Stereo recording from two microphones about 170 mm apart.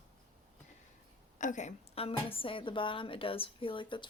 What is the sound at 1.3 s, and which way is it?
A woman's voice, 45° left (ahead or behind).